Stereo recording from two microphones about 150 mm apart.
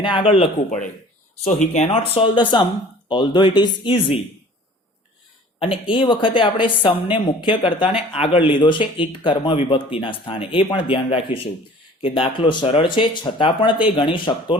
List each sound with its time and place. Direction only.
0.0 s speech: 35° left (ahead or behind)
1.5 s speech: 55° left (ahead or behind); by 4.2 s 35° left (ahead or behind)
5.5 s speech: 35° left (ahead or behind)